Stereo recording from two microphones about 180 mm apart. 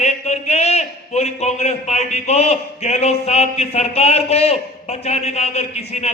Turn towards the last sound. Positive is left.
turn(degrees=35)  # may be behind; listen again after turning